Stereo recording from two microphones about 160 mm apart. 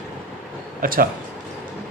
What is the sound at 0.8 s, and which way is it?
Speech, 65° right (ahead or behind).